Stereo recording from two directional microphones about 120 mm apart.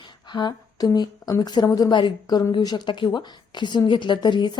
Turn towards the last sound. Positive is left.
turn(degrees=40)  # may be behind; listen again after turning